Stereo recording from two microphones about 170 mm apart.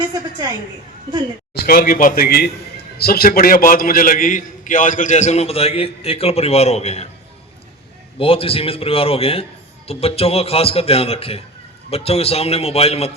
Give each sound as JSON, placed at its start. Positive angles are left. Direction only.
{"t": 1.5, "sound": "a man's voice", "side_deg": 60}
{"t": 8.2, "sound": "speech", "side_deg": 35}